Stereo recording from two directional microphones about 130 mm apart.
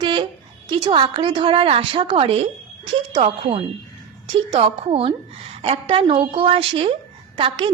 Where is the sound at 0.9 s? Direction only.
40° right (ahead or behind).